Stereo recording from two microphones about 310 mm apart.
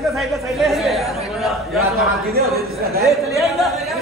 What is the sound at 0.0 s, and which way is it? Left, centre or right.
A man's voice, centre.